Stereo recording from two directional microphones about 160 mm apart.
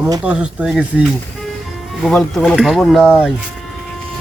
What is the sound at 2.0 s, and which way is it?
Speech, centre (ahead or behind).